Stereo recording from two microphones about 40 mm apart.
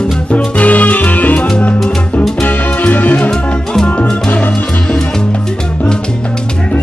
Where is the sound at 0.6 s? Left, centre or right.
Left.